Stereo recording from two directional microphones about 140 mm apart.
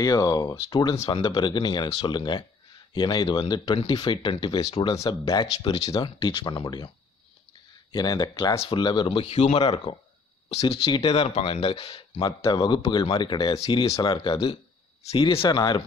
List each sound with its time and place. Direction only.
0.0 s speech: 25° left (ahead or behind)
7.9 s speech: 30° left (ahead or behind)
12.3 s speech: 30° left (ahead or behind)